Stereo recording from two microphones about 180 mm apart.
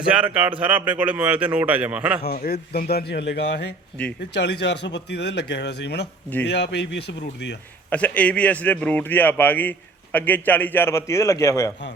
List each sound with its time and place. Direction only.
0.1 s speech: 10° right (ahead or behind)
2.2 s a man's voice: 60° left (ahead or behind)
4.0 s speech: 5° left (ahead or behind)
4.4 s speech: 70° left (ahead or behind)
7.9 s speech: 10° left (ahead or behind)